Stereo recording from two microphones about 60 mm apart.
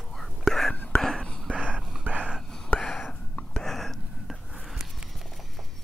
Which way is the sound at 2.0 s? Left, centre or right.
Right.